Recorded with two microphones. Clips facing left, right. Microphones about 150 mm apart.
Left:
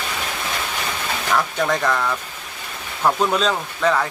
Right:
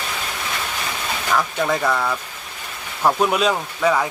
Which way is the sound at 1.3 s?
5° right (ahead or behind).